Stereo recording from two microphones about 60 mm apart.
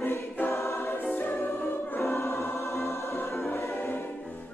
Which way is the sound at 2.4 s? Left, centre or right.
Left.